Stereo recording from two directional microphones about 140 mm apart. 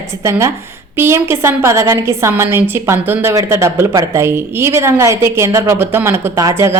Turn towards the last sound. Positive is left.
turn(degrees=-20)  # may be behind; listen again after turning